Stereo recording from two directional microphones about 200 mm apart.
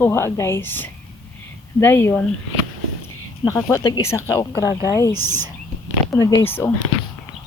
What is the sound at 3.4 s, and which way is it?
A woman's voice, 15° left (ahead or behind).